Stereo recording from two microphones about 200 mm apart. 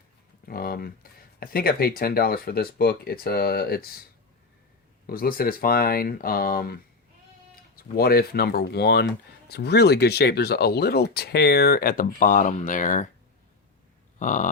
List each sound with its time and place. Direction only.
0.4 s speech: 50° left (ahead or behind)
5.0 s speech: 45° left (ahead or behind)
14.2 s a sound: 40° left (ahead or behind)